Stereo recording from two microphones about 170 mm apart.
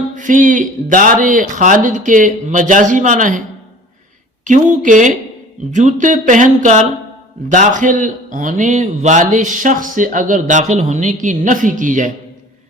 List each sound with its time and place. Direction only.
0.2 s speech: 50° right (ahead or behind)
4.4 s speech: 50° right (ahead or behind)